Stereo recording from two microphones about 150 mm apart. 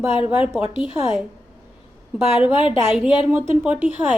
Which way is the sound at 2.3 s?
35° left (ahead or behind).